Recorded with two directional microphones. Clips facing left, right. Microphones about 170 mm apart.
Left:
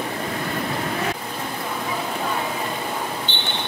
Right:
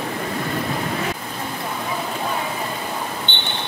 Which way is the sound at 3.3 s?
35° left (ahead or behind).